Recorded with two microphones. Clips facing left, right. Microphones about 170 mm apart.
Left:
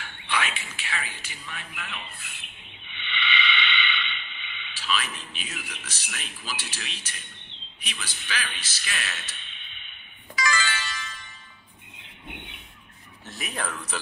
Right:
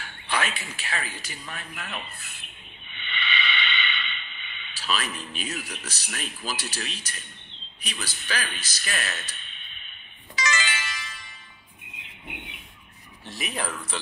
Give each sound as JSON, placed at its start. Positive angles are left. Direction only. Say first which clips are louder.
{"t": 0.3, "sound": "a man's voice", "louder": "right 1 dB", "side_deg": -40}
{"t": 10.3, "sound": "music", "louder": "left 1 dB", "side_deg": -20}
{"t": 12.3, "sound": "a sound", "louder": "right 1 dB", "side_deg": -5}
{"t": 13.3, "sound": "speech", "louder": "right 1 dB", "side_deg": -10}